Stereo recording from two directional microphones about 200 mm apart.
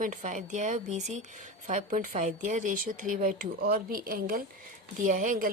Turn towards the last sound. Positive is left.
turn(degrees=-40)  # may be behind; listen again after turning